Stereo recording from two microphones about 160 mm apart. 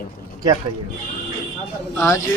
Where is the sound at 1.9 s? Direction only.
20° left (ahead or behind).